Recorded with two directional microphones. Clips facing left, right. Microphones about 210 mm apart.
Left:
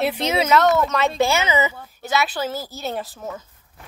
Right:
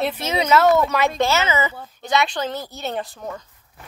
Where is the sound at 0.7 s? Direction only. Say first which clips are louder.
Right 1 dB; 15° right (ahead or behind).